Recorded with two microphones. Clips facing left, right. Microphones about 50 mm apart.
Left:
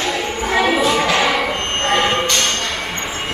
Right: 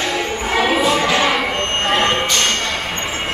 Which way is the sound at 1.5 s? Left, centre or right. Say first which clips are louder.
Right 1 dB; right.